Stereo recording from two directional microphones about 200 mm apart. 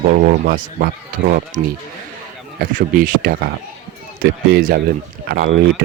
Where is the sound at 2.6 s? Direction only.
45° right (ahead or behind).